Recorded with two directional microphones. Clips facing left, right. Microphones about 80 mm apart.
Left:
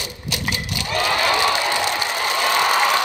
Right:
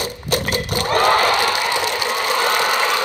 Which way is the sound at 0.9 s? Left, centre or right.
Right.